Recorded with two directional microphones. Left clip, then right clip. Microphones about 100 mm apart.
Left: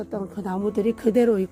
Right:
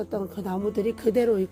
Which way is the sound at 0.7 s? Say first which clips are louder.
Left 3 dB; 60° left (ahead or behind).